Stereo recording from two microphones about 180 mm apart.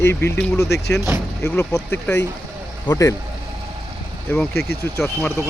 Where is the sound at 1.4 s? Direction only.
15° left (ahead or behind).